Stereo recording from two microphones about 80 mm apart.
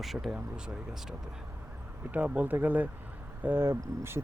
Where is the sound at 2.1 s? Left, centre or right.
Centre.